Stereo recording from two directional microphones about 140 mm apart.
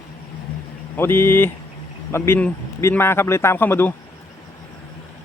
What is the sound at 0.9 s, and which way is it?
A man's voice, 15° left (ahead or behind).